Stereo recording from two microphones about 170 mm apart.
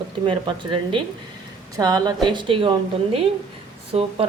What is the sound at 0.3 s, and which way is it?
A woman's voice, 30° right (ahead or behind).